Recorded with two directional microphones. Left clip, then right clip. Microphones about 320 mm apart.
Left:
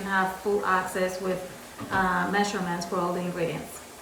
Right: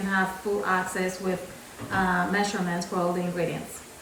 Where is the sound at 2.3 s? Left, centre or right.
Centre.